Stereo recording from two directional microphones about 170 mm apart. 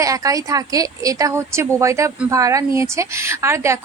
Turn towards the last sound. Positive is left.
turn(degrees=-15)  # may be behind; listen again after turning